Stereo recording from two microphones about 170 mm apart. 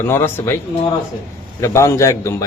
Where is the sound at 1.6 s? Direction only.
15° left (ahead or behind).